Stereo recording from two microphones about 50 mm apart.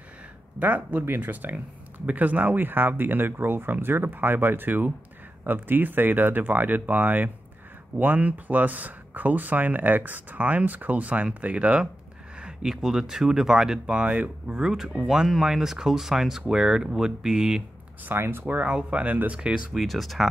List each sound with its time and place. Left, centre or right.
0.6 s speech: right; by 14.0 s centre
14.0 s speech: right
14.5 s speech: centre
18.1 s speech: right
18.7 s speech: right
19.3 s speech: centre
19.7 s speech: centre